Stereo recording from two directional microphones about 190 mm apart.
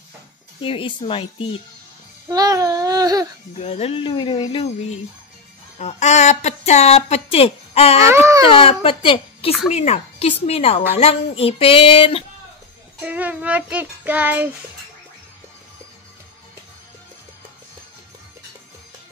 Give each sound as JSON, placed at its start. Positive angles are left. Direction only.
{"t": 0.6, "sound": "speech", "side_deg": 30}
{"t": 2.2, "sound": "a sound", "side_deg": -20}
{"t": 3.5, "sound": "speech", "side_deg": 35}
{"t": 5.8, "sound": "a woman's voice", "side_deg": 35}
{"t": 8.1, "sound": "child singing", "side_deg": -15}
{"t": 8.5, "sound": "a woman's voice", "side_deg": 30}
{"t": 13.0, "sound": "child singing", "side_deg": -10}